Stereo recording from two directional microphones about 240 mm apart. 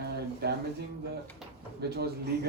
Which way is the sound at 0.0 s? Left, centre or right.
Right.